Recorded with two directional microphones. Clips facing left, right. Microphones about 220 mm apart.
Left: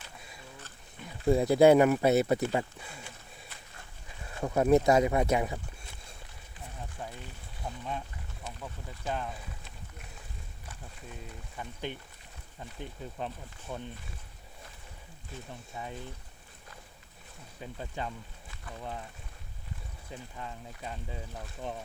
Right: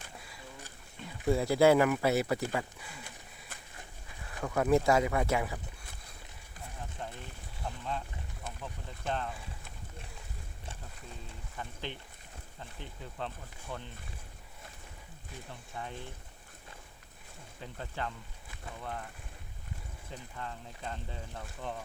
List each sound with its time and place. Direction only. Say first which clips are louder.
1.3 s speech: left 4 dB; 20° left (ahead or behind)
4.4 s speech: left 3 dB; 20° left (ahead or behind)
7.6 s speech: left 1 dB; 20° left (ahead or behind)
9.0 s speech: even; 10° left (ahead or behind)
11.5 s speech: left 3 dB; 15° left (ahead or behind)
13.1 s speech: even; 15° left (ahead or behind)
15.7 s speech: left 1 dB; 10° left (ahead or behind)
17.7 s speech: left 1 dB; 15° left (ahead or behind)
20.4 s speech: right 2 dB; 10° left (ahead or behind)